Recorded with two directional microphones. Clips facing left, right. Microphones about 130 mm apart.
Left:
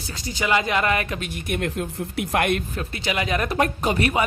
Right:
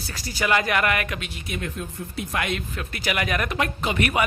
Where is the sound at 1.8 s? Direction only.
75° left (ahead or behind).